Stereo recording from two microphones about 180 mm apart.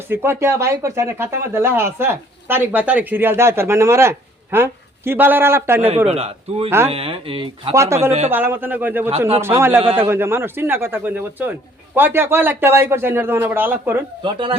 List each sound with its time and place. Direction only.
0.1 s speech: 15° right (ahead or behind)
6.1 s speech: 35° right (ahead or behind)
7.7 s speech: 15° right (ahead or behind)
14.2 s speech: 30° right (ahead or behind)